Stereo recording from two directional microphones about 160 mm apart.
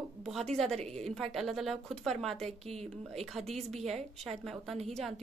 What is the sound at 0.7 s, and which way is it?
Speech, 40° right (ahead or behind).